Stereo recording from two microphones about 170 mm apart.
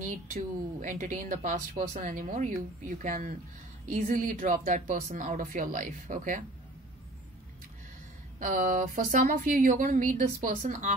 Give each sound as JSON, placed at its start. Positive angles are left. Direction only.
{"t": 0.0, "sound": "speech", "side_deg": -50}
{"t": 8.4, "sound": "speech", "side_deg": -50}